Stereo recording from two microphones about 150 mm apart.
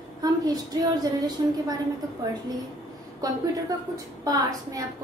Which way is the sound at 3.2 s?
25° right (ahead or behind).